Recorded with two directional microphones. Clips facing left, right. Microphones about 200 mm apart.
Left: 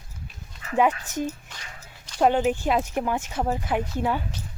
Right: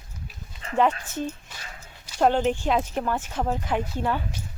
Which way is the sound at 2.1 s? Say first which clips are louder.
Even; centre (ahead or behind).